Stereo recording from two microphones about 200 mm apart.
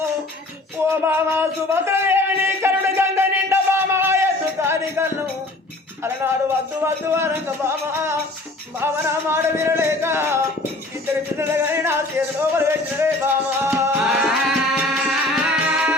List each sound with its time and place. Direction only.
0.9 s a sound: 10° right (ahead or behind)
6.0 s music: 10° right (ahead or behind)
9.3 s music: 10° right (ahead or behind)